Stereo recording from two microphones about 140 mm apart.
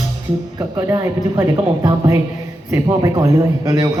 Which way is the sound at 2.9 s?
20° right (ahead or behind).